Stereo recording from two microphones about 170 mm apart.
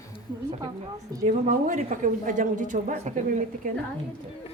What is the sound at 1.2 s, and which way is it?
A woman's voice, 50° right (ahead or behind).